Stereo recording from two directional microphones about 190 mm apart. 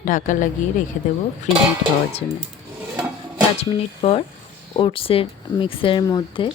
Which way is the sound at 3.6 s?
30° left (ahead or behind).